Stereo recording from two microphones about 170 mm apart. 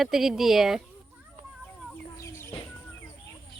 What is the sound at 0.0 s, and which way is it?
Speech, centre (ahead or behind).